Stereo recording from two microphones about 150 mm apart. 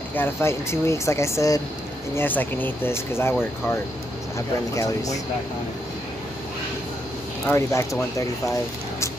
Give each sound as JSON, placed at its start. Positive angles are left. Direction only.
{"t": 0.1, "sound": "speech", "side_deg": 15}
{"t": 7.5, "sound": "speech", "side_deg": 20}